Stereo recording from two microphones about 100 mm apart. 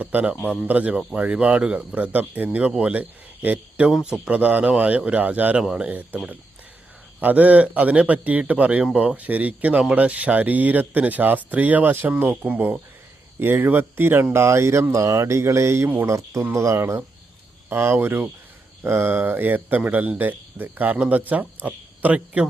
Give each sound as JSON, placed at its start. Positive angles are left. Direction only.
{"t": 0.0, "sound": "speech", "side_deg": -15}